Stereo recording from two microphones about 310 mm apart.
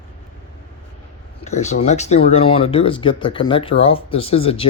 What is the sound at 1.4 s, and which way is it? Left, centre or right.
Speech, left.